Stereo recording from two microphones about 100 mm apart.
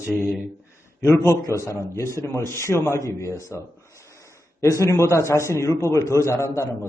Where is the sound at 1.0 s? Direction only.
30° left (ahead or behind).